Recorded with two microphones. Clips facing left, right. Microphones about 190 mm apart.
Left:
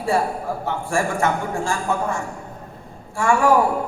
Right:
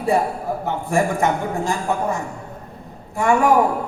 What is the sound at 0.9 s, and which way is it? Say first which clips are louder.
A man's voice: right 2 dB; 20° right (ahead or behind).